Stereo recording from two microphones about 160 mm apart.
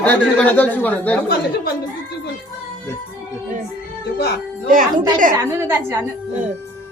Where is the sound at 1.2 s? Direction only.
70° left (ahead or behind).